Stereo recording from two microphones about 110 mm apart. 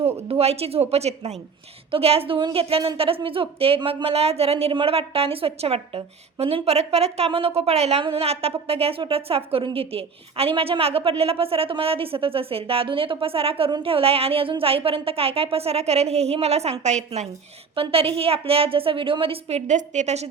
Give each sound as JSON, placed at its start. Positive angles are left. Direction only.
{"t": 0.3, "sound": "a woman's voice", "side_deg": -65}
{"t": 1.9, "sound": "a woman's voice", "side_deg": -60}
{"t": 7.3, "sound": "a woman's voice", "side_deg": -60}
{"t": 17.7, "sound": "a woman's voice", "side_deg": -60}